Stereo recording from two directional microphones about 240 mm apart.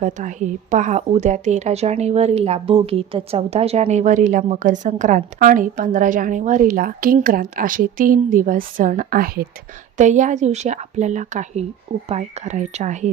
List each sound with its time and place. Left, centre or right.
0.0 s a woman's voice: right